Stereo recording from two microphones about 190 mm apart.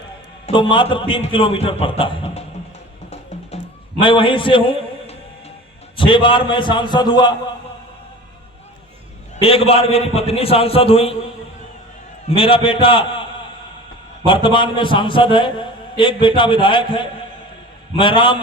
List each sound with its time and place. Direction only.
0.4 s a man's voice: 25° left (ahead or behind)
3.5 s music: 35° left (ahead or behind)
4.0 s a man's voice: 25° left (ahead or behind)
6.0 s a man's voice: 25° left (ahead or behind)
9.4 s a man's voice: 30° left (ahead or behind)
12.3 s a man's voice: 30° left (ahead or behind)
14.3 s a man's voice: 25° left (ahead or behind)